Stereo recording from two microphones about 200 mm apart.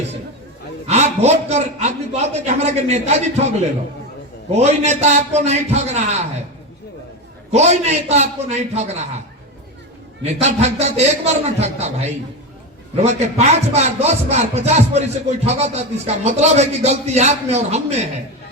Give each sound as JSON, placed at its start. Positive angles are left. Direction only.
{"t": 0.9, "sound": "speech", "side_deg": -35}
{"t": 4.5, "sound": "speech", "side_deg": -35}
{"t": 7.5, "sound": "speech", "side_deg": -35}
{"t": 10.2, "sound": "speech", "side_deg": -35}